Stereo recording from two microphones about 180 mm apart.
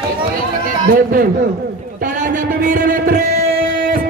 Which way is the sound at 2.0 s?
45° right (ahead or behind).